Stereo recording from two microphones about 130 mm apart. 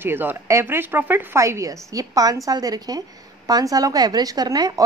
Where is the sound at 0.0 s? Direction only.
15° right (ahead or behind).